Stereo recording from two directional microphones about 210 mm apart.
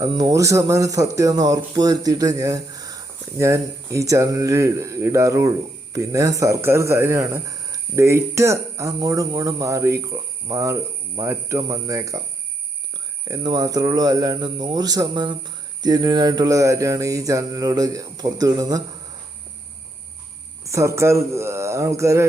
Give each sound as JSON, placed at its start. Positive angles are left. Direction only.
{"t": 0.0, "sound": "speech", "side_deg": -15}
{"t": 13.2, "sound": "speech", "side_deg": -20}
{"t": 20.7, "sound": "speech", "side_deg": -15}